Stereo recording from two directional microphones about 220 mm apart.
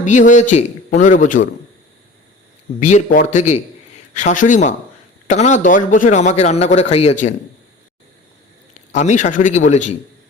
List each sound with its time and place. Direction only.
0.0 s a man's voice: 35° left (ahead or behind)
2.8 s a man's voice: 35° left (ahead or behind)
8.9 s a man's voice: 35° left (ahead or behind)